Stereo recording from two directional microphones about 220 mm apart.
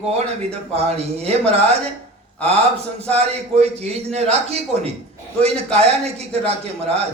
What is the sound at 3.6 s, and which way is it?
A man's voice, 30° right (ahead or behind).